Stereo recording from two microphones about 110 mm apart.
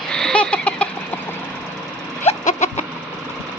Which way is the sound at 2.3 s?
90° left.